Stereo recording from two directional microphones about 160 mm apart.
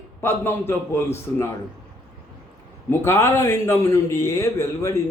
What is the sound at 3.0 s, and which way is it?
A man's voice, 15° left (ahead or behind).